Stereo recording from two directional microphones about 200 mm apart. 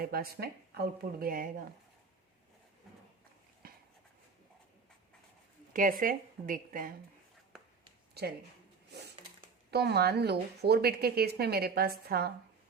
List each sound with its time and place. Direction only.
0.0 s a woman's voice: 50° right (ahead or behind)
3.6 s a sound: 45° right (ahead or behind)
5.7 s a woman's voice: 45° right (ahead or behind)
8.2 s a woman's voice: 55° right (ahead or behind)
9.7 s a woman's voice: 55° right (ahead or behind)